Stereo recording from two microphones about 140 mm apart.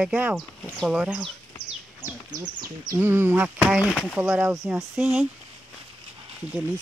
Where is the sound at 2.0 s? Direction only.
15° right (ahead or behind).